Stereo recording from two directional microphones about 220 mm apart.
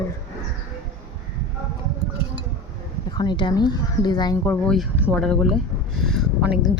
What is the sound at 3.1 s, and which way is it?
Speech, 20° left (ahead or behind).